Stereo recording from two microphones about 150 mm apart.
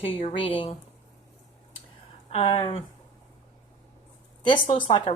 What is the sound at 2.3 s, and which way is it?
Speech, 35° left (ahead or behind).